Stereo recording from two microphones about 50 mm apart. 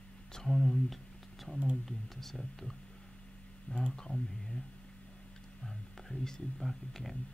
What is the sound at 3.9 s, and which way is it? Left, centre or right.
Speech, centre.